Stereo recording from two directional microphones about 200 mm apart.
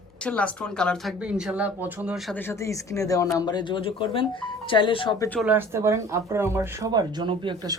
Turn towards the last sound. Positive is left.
turn(degrees=-20)  # may be behind; listen again after turning